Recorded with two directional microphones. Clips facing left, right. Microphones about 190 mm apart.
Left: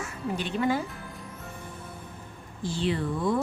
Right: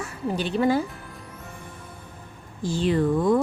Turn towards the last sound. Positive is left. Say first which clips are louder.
# right 6 dB
turn(degrees=-45)  # may be behind; listen again after turning